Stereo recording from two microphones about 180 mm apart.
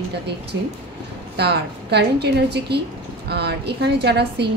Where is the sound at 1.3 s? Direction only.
65° right (ahead or behind).